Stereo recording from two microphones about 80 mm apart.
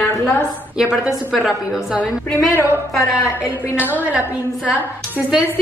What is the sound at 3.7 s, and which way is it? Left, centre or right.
A woman's voice, right.